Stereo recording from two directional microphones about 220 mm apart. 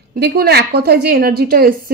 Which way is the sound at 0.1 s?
45° right (ahead or behind).